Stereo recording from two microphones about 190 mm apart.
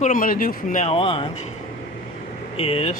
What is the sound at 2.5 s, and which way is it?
Speech, 30° left (ahead or behind).